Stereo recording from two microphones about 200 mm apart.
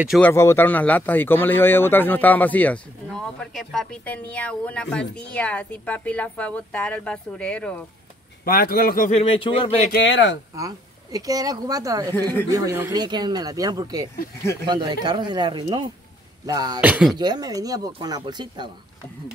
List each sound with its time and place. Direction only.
0.2 s speech: 15° left (ahead or behind)
8.5 s a man's voice: 50° left (ahead or behind)
9.2 s speech: 25° left (ahead or behind)
10.0 s speech: 65° left (ahead or behind)
10.5 s speech: 15° right (ahead or behind)
16.8 s speech: 5° right (ahead or behind)
17.2 s speech: 20° right (ahead or behind)